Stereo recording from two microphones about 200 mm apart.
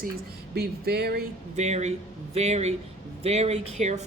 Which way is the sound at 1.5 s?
35° right (ahead or behind).